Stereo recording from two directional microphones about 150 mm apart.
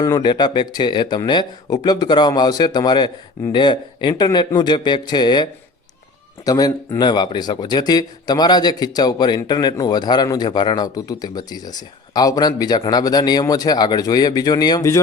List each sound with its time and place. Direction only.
0.0 s a man's voice: 25° left (ahead or behind)